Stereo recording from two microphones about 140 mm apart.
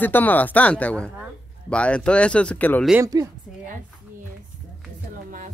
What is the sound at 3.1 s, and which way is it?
Speech, 25° right (ahead or behind).